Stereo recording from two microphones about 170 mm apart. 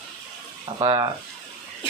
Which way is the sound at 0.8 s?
30° right (ahead or behind).